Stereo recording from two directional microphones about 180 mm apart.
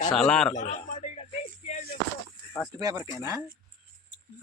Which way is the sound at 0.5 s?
40° left (ahead or behind).